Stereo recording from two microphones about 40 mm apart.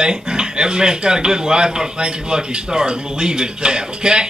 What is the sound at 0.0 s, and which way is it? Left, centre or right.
Speech, centre.